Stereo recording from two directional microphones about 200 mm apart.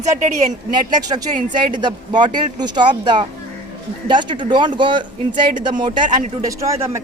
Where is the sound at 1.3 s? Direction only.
40° right (ahead or behind).